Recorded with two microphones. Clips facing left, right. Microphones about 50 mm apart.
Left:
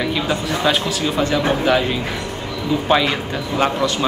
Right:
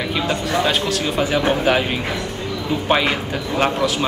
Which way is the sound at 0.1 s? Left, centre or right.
Centre.